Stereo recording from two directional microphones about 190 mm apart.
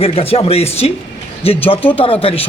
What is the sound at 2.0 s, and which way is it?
Speech, 30° left (ahead or behind).